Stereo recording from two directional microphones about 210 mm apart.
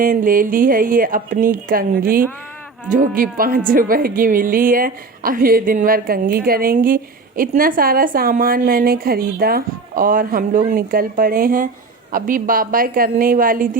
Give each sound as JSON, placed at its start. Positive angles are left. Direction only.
{"t": 0.0, "sound": "a woman's voice", "side_deg": -40}